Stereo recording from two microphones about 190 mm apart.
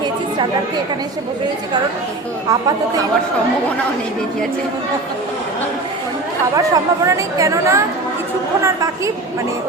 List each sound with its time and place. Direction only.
2.5 s speech: 20° right (ahead or behind)
6.6 s a woman's voice: 15° right (ahead or behind)